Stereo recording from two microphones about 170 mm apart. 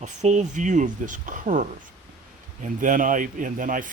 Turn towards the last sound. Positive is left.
turn(degrees=-50)  # may be behind; listen again after turning